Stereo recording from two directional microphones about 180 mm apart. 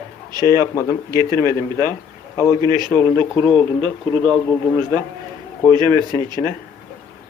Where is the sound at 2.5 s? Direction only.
25° right (ahead or behind).